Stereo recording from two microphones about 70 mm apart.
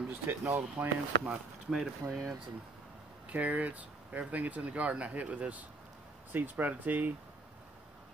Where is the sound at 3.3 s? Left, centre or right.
Right.